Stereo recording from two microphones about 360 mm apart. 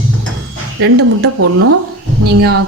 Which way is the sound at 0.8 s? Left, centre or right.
Right.